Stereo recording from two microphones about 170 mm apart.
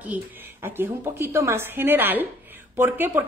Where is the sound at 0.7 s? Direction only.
15° right (ahead or behind).